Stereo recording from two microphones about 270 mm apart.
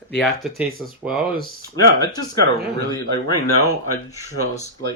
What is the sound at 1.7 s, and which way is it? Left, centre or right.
Speech, centre.